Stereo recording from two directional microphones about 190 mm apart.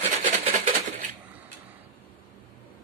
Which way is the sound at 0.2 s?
35° right (ahead or behind).